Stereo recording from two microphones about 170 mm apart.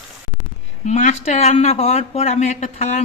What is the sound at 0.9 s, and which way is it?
Speech, 45° left (ahead or behind).